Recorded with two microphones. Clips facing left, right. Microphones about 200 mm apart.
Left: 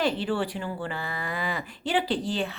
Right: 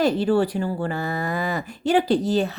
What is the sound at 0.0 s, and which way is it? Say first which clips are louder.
Speech: right 7 dB; 40° right (ahead or behind).